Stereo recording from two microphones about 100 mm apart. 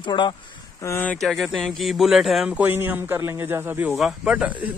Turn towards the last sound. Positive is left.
turn(degrees=-15)  # may be behind; listen again after turning